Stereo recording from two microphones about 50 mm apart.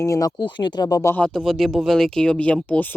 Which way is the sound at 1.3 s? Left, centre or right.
Centre.